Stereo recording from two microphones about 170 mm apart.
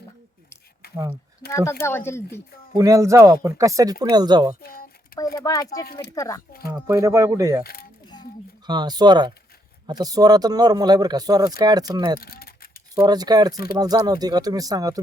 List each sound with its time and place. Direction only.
1.5 s speech: 15° left (ahead or behind)
2.7 s speech: 20° right (ahead or behind)
4.6 s speech: 60° left (ahead or behind)
5.4 s speech: 20° left (ahead or behind)
5.8 s speech: 65° left (ahead or behind)
6.1 s speech: 15° left (ahead or behind)
6.7 s speech: 20° right (ahead or behind)
7.6 s speech: 60° left (ahead or behind)
8.6 s speech: 25° right (ahead or behind)
12.2 s speech: 65° left (ahead or behind)
13.0 s speech: 25° right (ahead or behind)